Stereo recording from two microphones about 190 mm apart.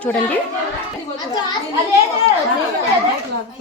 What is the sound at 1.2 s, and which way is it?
Speech, 20° left (ahead or behind).